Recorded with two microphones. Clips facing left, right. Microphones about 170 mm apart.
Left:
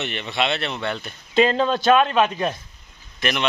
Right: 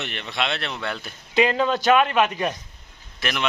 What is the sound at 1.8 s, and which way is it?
Speech, 15° right (ahead or behind).